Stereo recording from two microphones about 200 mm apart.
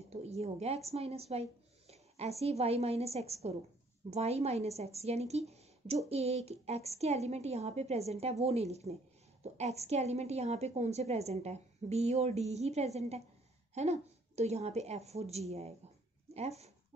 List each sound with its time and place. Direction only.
0.1 s a woman's voice: 30° right (ahead or behind)